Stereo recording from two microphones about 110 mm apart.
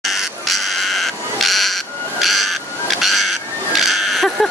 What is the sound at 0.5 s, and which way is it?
Insect, centre (ahead or behind).